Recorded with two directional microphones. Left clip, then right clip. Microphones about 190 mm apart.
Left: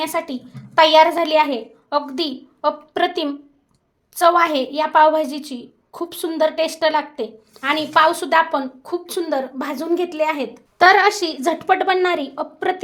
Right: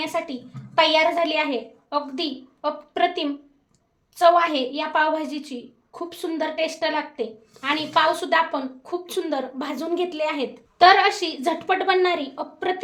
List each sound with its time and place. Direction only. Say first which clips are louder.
0.0 s a woman's voice: left 4 dB; 40° left (ahead or behind)